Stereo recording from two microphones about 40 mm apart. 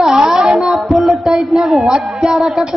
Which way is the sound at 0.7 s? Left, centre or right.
Centre.